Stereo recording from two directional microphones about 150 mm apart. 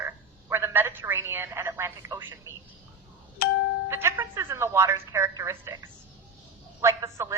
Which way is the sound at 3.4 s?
75° left (ahead or behind).